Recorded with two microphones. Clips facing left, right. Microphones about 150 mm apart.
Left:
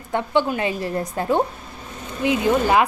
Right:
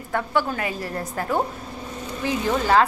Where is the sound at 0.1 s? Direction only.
20° left (ahead or behind).